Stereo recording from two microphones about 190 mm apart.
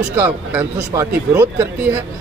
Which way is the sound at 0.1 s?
10° right (ahead or behind).